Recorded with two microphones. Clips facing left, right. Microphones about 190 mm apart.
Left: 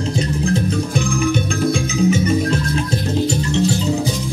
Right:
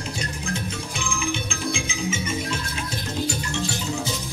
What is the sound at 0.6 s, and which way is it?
Music, 40° left (ahead or behind).